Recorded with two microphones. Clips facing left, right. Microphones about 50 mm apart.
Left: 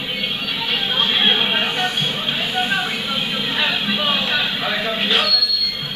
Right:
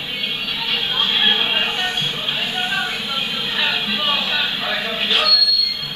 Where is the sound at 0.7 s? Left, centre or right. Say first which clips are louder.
Left 1 dB; centre.